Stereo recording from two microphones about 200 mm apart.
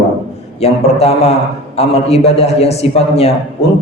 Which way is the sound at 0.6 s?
30° left (ahead or behind).